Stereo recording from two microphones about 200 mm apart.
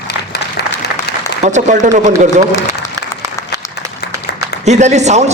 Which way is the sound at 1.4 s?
35° right (ahead or behind).